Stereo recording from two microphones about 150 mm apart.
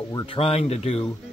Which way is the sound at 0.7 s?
45° left (ahead or behind).